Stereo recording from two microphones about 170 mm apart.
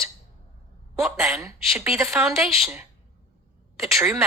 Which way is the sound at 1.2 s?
15° right (ahead or behind).